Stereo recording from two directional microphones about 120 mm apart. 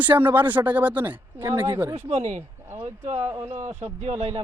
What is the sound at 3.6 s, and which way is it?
Speech, 20° right (ahead or behind).